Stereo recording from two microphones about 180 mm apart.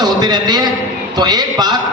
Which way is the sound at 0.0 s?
20° right (ahead or behind).